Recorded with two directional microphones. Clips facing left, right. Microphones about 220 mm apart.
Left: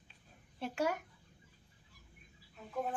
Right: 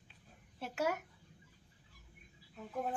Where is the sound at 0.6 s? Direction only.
5° right (ahead or behind).